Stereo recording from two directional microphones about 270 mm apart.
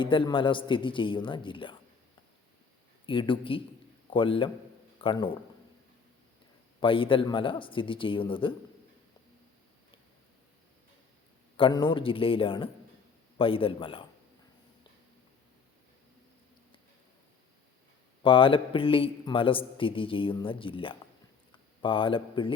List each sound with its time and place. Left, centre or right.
0.0 s a man's voice: centre
3.1 s a man's voice: centre
6.7 s a man's voice: centre
11.5 s a man's voice: centre
18.2 s a man's voice: centre